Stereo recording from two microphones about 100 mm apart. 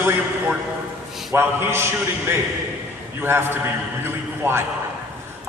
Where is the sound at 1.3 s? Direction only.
25° right (ahead or behind).